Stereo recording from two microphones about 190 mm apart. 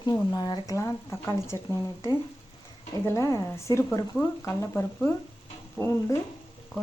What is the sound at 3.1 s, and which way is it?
Speech, 15° left (ahead or behind).